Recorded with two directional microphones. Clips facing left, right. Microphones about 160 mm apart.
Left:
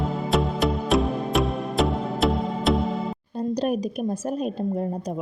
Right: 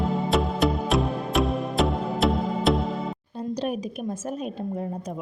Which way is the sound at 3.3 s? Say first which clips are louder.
Left 4 dB; 40° left (ahead or behind).